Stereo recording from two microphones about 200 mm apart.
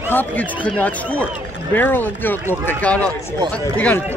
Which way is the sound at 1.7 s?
10° left (ahead or behind).